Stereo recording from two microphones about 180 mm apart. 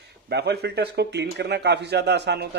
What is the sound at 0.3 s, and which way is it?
A man's voice, 65° right (ahead or behind).